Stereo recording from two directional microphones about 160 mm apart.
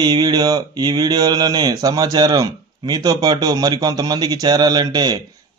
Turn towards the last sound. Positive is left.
turn(degrees=-25)  # may be behind; listen again after turning